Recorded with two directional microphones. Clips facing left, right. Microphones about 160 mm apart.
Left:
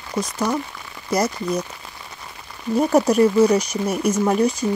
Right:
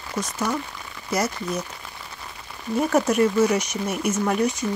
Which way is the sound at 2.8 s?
35° left (ahead or behind).